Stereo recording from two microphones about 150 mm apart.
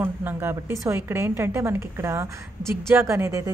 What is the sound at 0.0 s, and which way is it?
A woman's voice, 15° right (ahead or behind).